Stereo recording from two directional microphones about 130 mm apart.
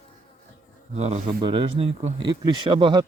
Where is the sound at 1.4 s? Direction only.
40° right (ahead or behind).